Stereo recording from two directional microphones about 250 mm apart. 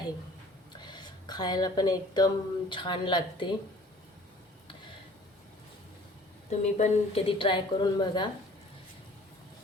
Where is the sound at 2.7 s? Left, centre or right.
Centre.